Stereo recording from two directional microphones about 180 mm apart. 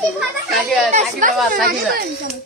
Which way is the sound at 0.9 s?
50° right (ahead or behind).